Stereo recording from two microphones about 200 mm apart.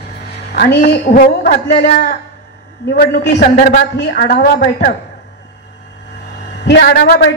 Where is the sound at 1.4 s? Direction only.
45° left (ahead or behind).